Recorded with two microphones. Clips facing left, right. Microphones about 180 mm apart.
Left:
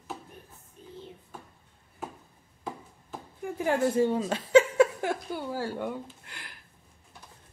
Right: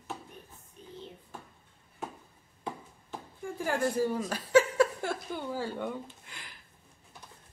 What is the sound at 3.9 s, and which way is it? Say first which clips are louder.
Chuckle: left 4 dB; 25° left (ahead or behind).